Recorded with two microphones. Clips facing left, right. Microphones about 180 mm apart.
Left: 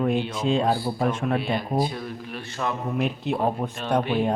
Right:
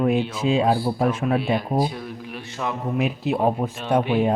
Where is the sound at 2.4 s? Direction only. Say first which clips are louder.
Even; 15° right (ahead or behind).